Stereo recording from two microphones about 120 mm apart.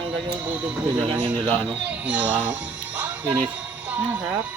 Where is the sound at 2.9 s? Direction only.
15° right (ahead or behind).